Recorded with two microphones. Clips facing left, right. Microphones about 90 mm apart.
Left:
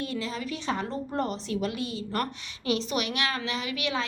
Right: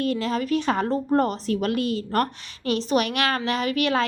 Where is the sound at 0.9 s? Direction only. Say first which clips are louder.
Right 8 dB; 45° right (ahead or behind).